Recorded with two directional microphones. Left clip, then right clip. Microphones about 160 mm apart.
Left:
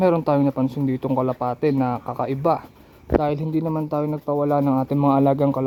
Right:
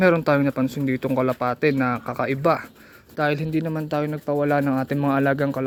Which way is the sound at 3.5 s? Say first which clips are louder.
Left 1 dB; 35° right (ahead or behind).